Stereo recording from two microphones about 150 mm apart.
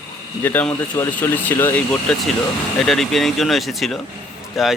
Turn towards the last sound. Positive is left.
turn(degrees=0)  # may be behind; listen again after turning